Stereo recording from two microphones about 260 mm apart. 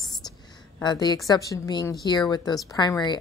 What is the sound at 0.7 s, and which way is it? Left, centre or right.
A woman's voice, centre.